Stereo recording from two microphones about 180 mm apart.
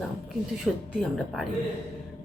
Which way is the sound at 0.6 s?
Centre (ahead or behind).